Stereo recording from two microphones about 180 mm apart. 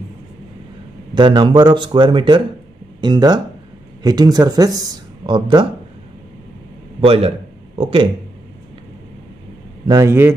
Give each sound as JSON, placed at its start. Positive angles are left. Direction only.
{"t": 1.1, "sound": "speech", "side_deg": -25}
{"t": 7.1, "sound": "a man's voice", "side_deg": -35}
{"t": 9.8, "sound": "a man's voice", "side_deg": -15}